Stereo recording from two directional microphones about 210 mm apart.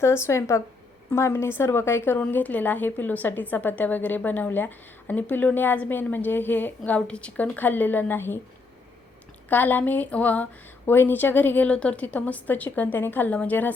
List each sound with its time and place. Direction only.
0.0 s a woman's voice: 10° left (ahead or behind)
9.5 s a woman's voice: 10° left (ahead or behind)